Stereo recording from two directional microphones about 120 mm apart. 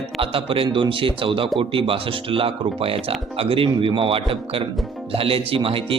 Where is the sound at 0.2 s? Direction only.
50° right (ahead or behind).